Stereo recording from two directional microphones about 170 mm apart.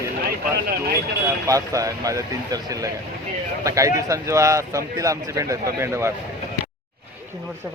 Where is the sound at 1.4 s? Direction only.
20° right (ahead or behind).